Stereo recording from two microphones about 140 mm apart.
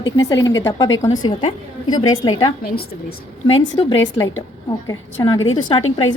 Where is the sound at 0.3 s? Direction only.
25° left (ahead or behind).